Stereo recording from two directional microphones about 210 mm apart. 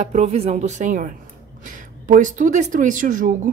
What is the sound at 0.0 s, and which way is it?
Speech, 30° right (ahead or behind).